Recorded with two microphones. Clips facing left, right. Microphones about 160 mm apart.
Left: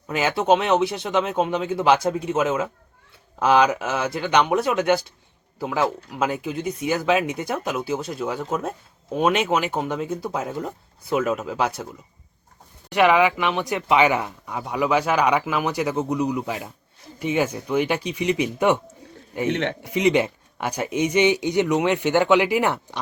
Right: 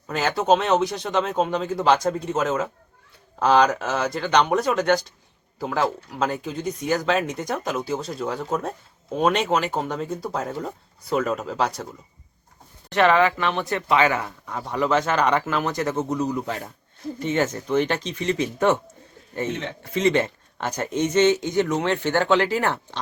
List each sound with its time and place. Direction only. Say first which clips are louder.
0.1 s speech: left 1 dB; 5° left (ahead or behind)
12.9 s speech: left 1 dB; 10° left (ahead or behind)
19.5 s a man's voice: left 8 dB; 70° left (ahead or behind)
19.8 s speech: even; 15° left (ahead or behind)